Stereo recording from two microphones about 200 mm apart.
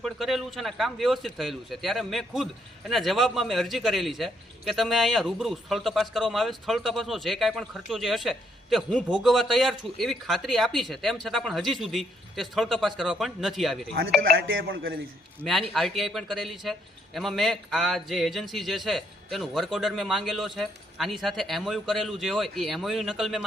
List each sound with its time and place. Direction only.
0.0 s a man's voice: centre (ahead or behind)
14.3 s music: 75° right (ahead or behind)
14.7 s a man's voice: 50° right (ahead or behind)
15.7 s a man's voice: centre (ahead or behind)